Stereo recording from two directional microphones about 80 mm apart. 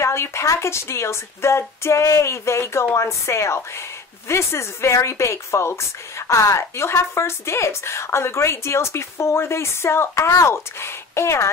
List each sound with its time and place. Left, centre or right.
0.0 s speech: left